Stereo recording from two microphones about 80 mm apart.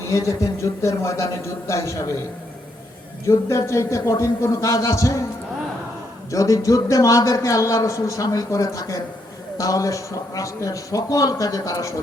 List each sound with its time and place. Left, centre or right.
0.1 s speech: left
3.7 s speech: left
6.3 s a man's voice: left